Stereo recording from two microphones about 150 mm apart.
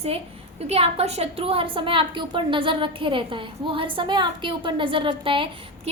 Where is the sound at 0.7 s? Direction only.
45° right (ahead or behind).